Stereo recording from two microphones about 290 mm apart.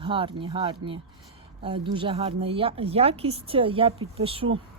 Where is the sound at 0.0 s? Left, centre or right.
Centre.